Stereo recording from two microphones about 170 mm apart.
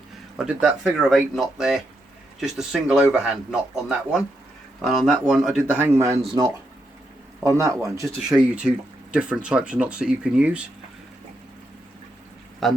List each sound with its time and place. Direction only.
0.3 s speech: 5° right (ahead or behind)
8.0 s speech: 5° right (ahead or behind)
12.6 s a man's voice: centre (ahead or behind)